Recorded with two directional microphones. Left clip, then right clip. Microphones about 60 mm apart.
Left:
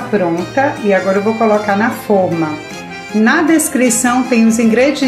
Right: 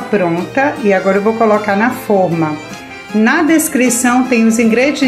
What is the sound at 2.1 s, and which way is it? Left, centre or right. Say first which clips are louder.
Speech: even; right.